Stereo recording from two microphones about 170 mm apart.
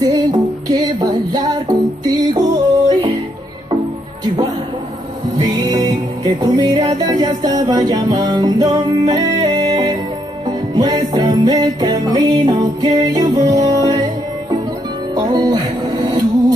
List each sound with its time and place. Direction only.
0.0 s music: 25° right (ahead or behind)
5.4 s music: 20° right (ahead or behind)
15.1 s music: 25° right (ahead or behind)